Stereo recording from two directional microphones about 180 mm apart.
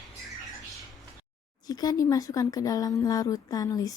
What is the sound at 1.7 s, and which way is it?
Speech, 20° left (ahead or behind).